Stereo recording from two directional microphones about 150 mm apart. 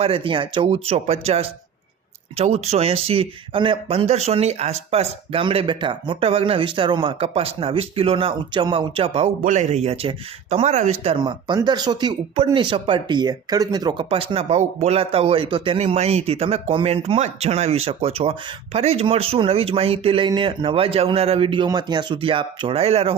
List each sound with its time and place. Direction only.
0.0 s speech: 35° right (ahead or behind)
9.4 s speech: 55° right (ahead or behind)
11.2 s speech: 30° right (ahead or behind)